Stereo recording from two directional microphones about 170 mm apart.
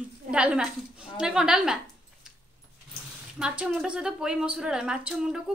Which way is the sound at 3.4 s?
5° right (ahead or behind).